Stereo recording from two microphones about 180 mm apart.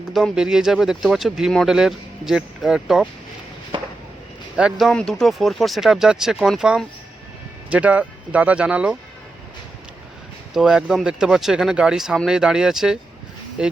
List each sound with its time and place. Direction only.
0.1 s speech: centre (ahead or behind)
3.7 s a sound: 25° right (ahead or behind)
4.5 s speech: 5° right (ahead or behind)
10.5 s speech: 5° right (ahead or behind)